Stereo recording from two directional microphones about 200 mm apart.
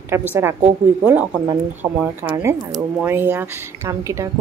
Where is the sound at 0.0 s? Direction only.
10° right (ahead or behind).